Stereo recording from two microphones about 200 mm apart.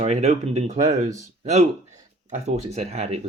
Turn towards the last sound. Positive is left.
turn(degrees=-30)  # may be behind; listen again after turning